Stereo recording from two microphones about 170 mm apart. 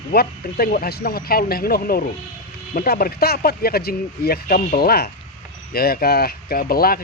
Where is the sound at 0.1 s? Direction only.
60° left (ahead or behind).